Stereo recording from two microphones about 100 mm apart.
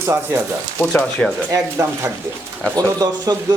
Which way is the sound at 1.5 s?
30° right (ahead or behind).